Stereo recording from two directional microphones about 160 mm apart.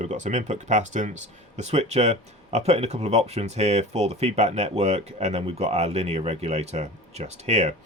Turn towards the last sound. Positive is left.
turn(degrees=-45)  # may be behind; listen again after turning